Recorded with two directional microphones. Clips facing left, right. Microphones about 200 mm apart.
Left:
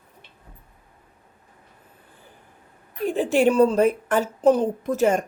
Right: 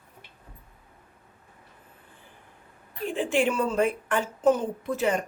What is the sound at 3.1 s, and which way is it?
A woman's voice, 40° left (ahead or behind).